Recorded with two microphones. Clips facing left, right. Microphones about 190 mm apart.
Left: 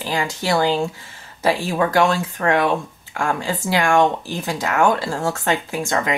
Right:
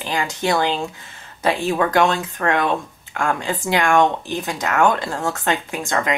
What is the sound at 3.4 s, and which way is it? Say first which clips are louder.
Speech: even; 20° right (ahead or behind).